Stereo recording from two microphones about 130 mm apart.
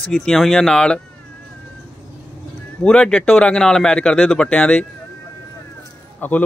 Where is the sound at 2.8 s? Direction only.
10° left (ahead or behind).